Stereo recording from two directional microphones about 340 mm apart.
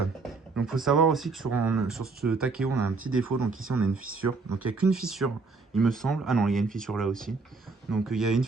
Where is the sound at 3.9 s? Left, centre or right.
Right.